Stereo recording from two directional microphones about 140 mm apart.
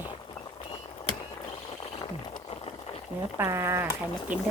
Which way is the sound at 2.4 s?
45° left (ahead or behind).